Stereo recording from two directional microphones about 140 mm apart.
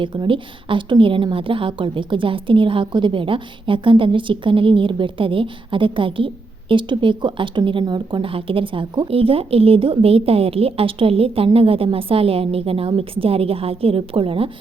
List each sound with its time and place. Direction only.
0.0 s a woman's voice: 35° right (ahead or behind)